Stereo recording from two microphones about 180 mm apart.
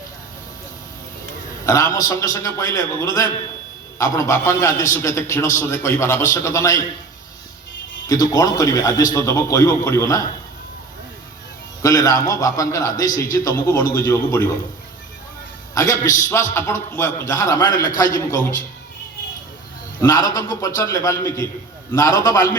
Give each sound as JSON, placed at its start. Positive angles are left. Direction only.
{"t": 1.6, "sound": "a man's voice", "side_deg": 15}
{"t": 8.0, "sound": "a man's voice", "side_deg": 20}
{"t": 11.8, "sound": "a man's voice", "side_deg": 20}
{"t": 15.7, "sound": "a man's voice", "side_deg": 15}
{"t": 20.0, "sound": "a man's voice", "side_deg": 20}